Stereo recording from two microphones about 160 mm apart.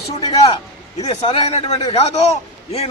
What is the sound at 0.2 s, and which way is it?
A man's voice, 30° left (ahead or behind).